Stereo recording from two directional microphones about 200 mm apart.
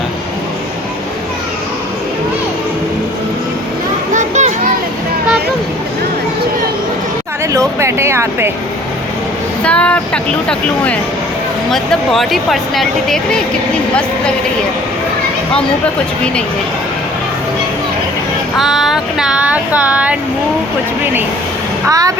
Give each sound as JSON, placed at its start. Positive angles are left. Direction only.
{"t": 4.1, "sound": "children playing", "side_deg": -35}
{"t": 7.5, "sound": "a sound", "side_deg": -15}
{"t": 9.6, "sound": "speech", "side_deg": 5}
{"t": 18.5, "sound": "speech", "side_deg": 0}
{"t": 21.8, "sound": "speech", "side_deg": -15}